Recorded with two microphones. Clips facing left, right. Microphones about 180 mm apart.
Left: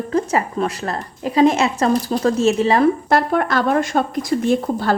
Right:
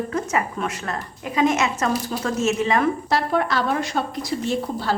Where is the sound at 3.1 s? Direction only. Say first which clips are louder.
Left 4 dB; 55° left (ahead or behind).